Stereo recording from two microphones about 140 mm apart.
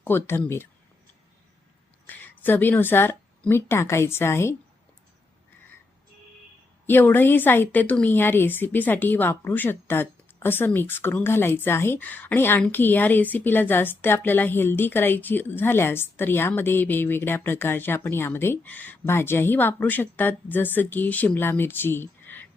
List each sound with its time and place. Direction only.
0.0 s a woman's voice: 15° left (ahead or behind)
2.0 s speech: 15° left (ahead or behind)
6.8 s a woman's voice: 15° left (ahead or behind)